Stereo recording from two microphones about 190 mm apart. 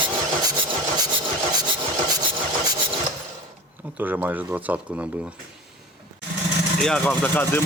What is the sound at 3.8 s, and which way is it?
Speech, 10° right (ahead or behind).